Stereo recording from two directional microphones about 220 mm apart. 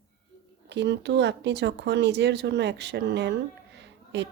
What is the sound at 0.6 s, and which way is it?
Speech, 50° right (ahead or behind).